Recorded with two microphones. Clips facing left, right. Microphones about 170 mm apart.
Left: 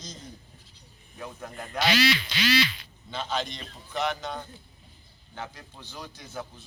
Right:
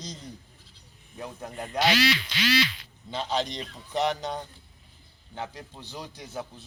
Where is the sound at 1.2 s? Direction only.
25° right (ahead or behind).